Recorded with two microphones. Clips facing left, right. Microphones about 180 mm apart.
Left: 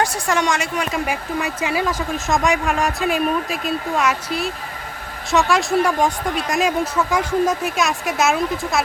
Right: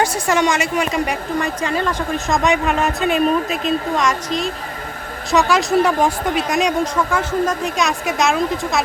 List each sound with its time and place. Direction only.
0.0 s speech: centre (ahead or behind)